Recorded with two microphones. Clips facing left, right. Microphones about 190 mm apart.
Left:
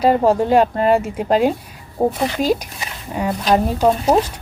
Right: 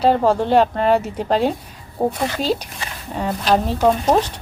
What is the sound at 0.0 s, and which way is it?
Speech, 10° left (ahead or behind).